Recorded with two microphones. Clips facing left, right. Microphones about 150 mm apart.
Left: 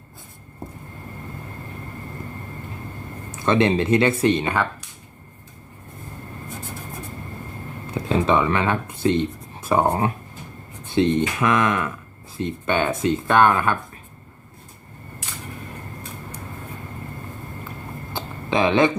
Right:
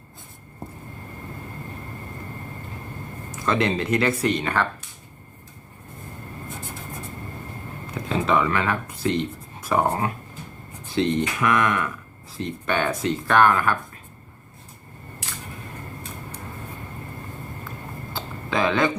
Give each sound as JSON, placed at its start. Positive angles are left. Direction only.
{"t": 3.3, "sound": "speech", "side_deg": 25}
{"t": 7.9, "sound": "speech", "side_deg": 25}
{"t": 18.1, "sound": "a sound", "side_deg": 20}